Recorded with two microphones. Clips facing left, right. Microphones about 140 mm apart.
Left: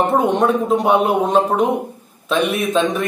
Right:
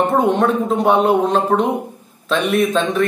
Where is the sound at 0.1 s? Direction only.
10° left (ahead or behind).